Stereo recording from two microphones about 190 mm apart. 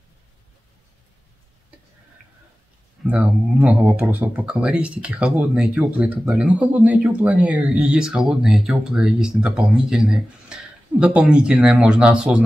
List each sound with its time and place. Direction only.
3.0 s speech: 5° right (ahead or behind)